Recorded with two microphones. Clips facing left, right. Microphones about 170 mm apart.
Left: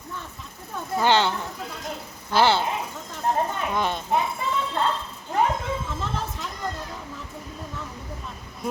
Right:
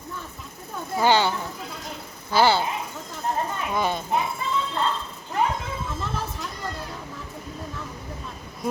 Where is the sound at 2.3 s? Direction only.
5° right (ahead or behind).